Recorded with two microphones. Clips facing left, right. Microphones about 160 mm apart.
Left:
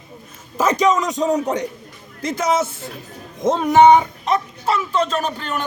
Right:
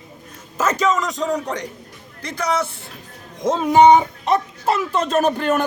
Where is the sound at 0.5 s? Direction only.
15° left (ahead or behind).